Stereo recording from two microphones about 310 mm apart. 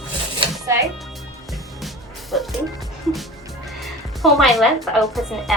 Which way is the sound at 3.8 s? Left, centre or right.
Centre.